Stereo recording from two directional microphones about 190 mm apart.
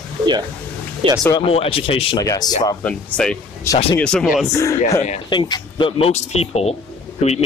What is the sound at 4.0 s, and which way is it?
Speech, 5° left (ahead or behind).